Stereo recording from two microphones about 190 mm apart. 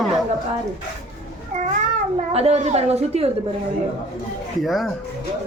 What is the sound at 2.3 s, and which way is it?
Speech, 35° right (ahead or behind).